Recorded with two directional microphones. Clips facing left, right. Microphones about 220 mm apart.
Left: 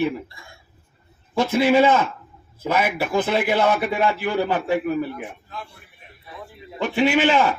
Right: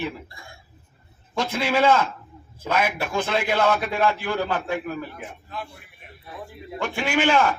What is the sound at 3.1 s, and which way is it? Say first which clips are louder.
A man's voice: left 6 dB; 20° left (ahead or behind).